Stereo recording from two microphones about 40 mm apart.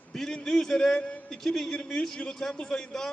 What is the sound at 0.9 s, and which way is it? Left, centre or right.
Speech, left.